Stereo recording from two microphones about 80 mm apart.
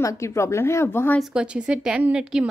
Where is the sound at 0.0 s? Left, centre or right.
Left.